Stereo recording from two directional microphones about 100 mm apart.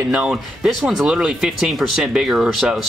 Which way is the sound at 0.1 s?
5° right (ahead or behind).